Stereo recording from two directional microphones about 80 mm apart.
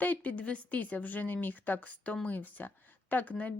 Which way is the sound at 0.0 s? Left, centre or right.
Left.